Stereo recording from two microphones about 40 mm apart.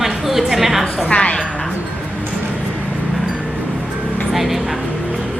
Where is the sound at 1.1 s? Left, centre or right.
Left.